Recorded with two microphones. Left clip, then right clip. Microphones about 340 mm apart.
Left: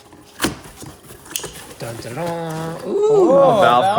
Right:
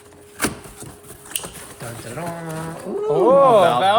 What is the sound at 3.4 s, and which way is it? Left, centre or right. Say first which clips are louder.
Speech: left 1 dB; left.